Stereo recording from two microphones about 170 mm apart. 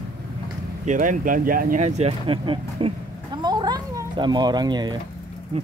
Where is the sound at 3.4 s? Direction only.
25° right (ahead or behind).